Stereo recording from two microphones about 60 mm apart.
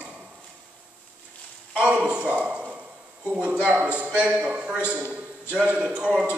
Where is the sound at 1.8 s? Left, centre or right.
Right.